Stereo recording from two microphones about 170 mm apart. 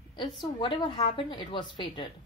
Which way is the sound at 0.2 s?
25° left (ahead or behind).